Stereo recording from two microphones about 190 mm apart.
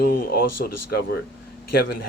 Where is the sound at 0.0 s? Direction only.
50° left (ahead or behind).